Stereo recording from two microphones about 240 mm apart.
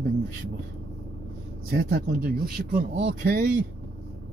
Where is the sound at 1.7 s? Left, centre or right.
Right.